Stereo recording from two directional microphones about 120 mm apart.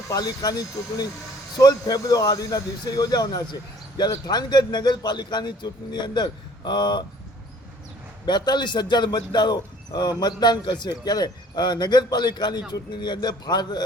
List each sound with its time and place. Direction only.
0.1 s speech: 35° left (ahead or behind)
1.5 s speech: 35° left (ahead or behind)
8.3 s speech: 40° left (ahead or behind)